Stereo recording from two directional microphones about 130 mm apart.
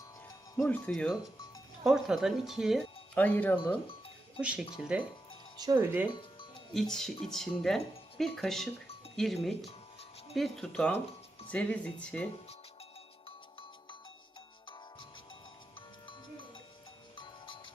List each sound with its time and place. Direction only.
0.5 s speech: 15° left (ahead or behind)
0.9 s speech: 5° left (ahead or behind)
3.2 s speech: 15° left (ahead or behind)
4.4 s speech: 10° right (ahead or behind)
6.1 s music: 40° left (ahead or behind)
6.7 s speech: 5° left (ahead or behind)
9.6 s music: 50° left (ahead or behind)
10.3 s speech: centre (ahead or behind)